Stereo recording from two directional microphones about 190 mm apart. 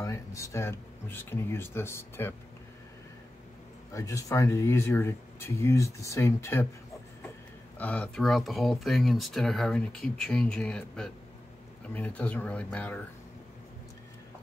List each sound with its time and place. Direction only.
0.0 s speech: 15° left (ahead or behind)
3.9 s speech: 15° left (ahead or behind)
7.8 s speech: 5° left (ahead or behind)